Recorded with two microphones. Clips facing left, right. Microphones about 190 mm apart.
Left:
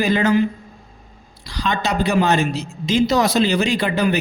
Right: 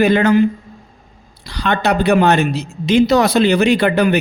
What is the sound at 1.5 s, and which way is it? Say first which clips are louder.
A man's voice: right 5 dB; 60° right (ahead or behind).